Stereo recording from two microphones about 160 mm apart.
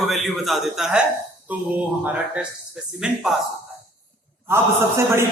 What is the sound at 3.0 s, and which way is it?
Speech, centre (ahead or behind).